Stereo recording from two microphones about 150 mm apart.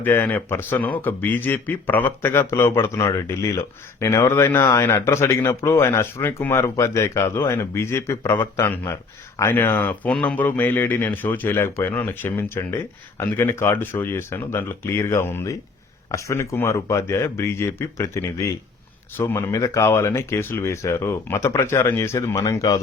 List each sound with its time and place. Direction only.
0.0 s speech: 15° left (ahead or behind)